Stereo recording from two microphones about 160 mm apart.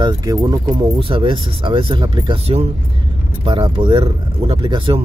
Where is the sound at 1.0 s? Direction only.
35° right (ahead or behind).